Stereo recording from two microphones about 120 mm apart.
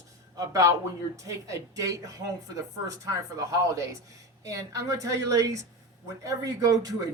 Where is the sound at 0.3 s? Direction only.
30° right (ahead or behind).